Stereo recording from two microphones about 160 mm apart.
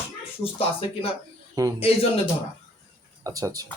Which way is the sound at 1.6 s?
25° right (ahead or behind).